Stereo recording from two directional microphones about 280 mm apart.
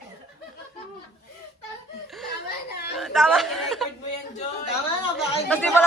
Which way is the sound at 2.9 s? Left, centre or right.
Centre.